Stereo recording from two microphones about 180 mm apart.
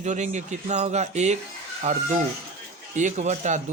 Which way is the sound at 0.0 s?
40° right (ahead or behind).